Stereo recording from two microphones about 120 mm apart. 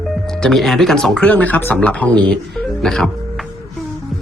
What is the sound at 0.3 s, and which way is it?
Speech, 5° left (ahead or behind).